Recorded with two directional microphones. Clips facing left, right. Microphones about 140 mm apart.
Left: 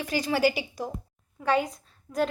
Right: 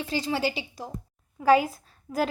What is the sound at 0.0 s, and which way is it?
Speech, 25° right (ahead or behind).